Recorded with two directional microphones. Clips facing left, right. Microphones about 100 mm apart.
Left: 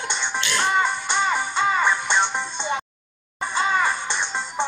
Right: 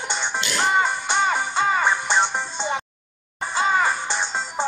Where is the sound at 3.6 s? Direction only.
45° right (ahead or behind).